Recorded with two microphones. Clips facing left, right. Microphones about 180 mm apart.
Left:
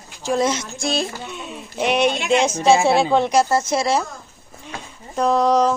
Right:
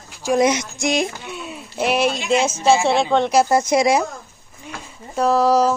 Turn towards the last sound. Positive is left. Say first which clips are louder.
# right 1 dB
turn(degrees=-5)  # may be behind; listen again after turning